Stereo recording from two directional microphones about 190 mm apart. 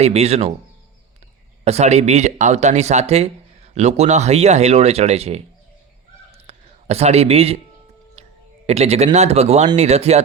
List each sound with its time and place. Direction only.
0.0 s speech: 35° right (ahead or behind)
1.6 s speech: 35° right (ahead or behind)
6.3 s a sound: 35° right (ahead or behind)
8.6 s speech: 35° right (ahead or behind)